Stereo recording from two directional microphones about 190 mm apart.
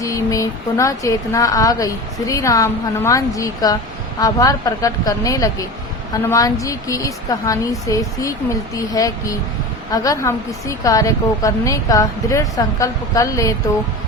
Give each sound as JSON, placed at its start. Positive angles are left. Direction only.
{"t": 0.0, "sound": "speech", "side_deg": 15}